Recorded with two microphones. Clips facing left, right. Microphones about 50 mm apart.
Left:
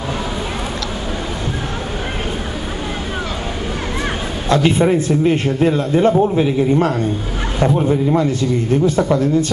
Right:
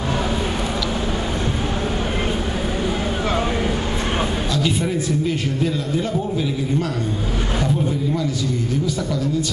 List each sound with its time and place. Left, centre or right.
4.5 s a man's voice: left